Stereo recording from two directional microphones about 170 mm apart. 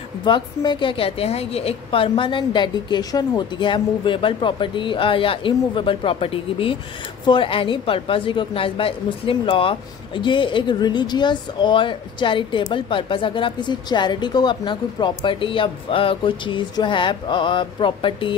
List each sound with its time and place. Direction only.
0.2 s a woman's voice: 25° left (ahead or behind)